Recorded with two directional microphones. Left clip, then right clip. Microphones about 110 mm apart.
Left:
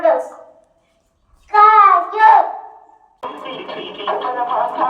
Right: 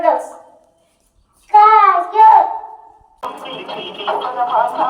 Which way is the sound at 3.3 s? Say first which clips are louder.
Right 1 dB; 30° left (ahead or behind).